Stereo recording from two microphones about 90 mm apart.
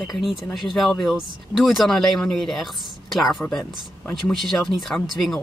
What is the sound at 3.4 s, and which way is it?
Speech, 20° left (ahead or behind).